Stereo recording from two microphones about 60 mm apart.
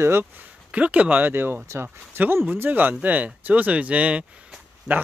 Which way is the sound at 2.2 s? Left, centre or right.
Right.